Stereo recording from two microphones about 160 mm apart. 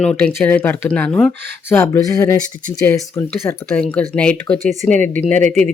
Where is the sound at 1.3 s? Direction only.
90° right.